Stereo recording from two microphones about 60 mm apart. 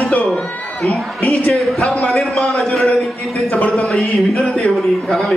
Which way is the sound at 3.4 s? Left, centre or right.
Left.